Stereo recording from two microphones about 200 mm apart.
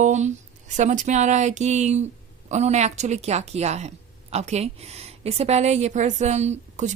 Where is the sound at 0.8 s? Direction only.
35° right (ahead or behind).